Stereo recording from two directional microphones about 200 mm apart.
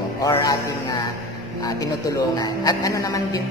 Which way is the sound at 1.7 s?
15° left (ahead or behind).